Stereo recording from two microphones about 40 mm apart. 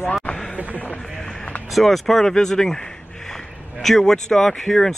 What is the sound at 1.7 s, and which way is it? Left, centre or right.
Speech, centre.